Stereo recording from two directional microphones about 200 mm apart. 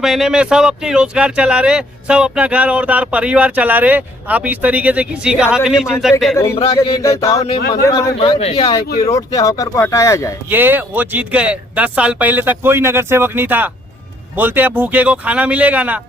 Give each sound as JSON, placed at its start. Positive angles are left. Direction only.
{"t": 0.0, "sound": "speech", "side_deg": 0}
{"t": 6.3, "sound": "speech", "side_deg": 15}
{"t": 10.5, "sound": "speech", "side_deg": -10}